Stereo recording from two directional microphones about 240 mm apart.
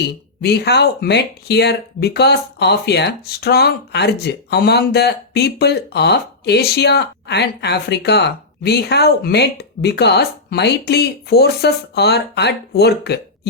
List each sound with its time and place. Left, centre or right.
0.0 s speech: left